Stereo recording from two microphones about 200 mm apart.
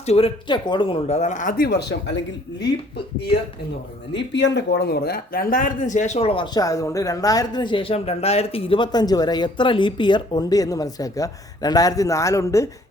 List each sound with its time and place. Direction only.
0.0 s speech: 30° left (ahead or behind); by 2.7 s 60° left (ahead or behind)
4.1 s speech: 60° left (ahead or behind); by 12.6 s 15° left (ahead or behind)